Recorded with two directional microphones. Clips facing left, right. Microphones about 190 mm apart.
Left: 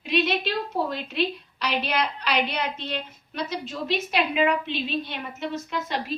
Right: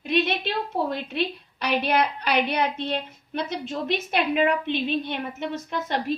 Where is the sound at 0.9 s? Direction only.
55° right (ahead or behind).